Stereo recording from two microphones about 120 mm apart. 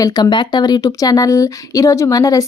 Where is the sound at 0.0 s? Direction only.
40° left (ahead or behind).